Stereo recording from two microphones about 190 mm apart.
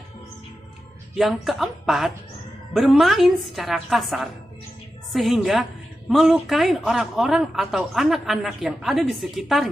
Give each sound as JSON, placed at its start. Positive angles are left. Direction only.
{"t": 1.1, "sound": "a woman's voice", "side_deg": 0}